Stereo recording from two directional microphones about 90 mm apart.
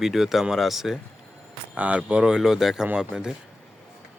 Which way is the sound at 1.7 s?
15° right (ahead or behind).